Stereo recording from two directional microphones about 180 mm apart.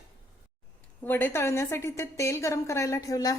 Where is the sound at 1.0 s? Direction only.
10° left (ahead or behind).